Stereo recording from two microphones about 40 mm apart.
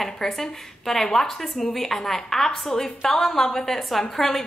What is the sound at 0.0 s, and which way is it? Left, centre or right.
A woman's voice, centre.